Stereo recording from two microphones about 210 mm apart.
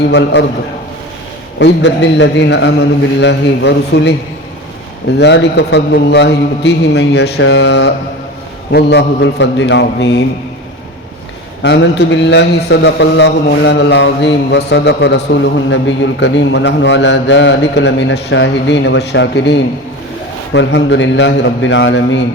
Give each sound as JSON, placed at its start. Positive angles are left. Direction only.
{"t": 0.1, "sound": "a man's voice", "side_deg": 55}
{"t": 1.5, "sound": "speech", "side_deg": 60}
{"t": 5.1, "sound": "speech", "side_deg": 55}
{"t": 11.6, "sound": "speech", "side_deg": 55}